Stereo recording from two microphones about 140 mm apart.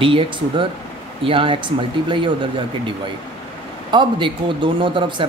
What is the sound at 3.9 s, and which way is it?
Speech, 35° right (ahead or behind).